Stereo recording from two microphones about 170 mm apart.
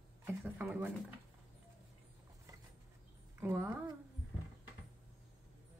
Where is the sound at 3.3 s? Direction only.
15° right (ahead or behind).